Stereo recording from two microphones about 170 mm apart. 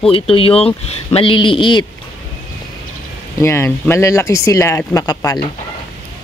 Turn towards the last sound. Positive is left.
turn(degrees=20)  # may be behind; listen again after turning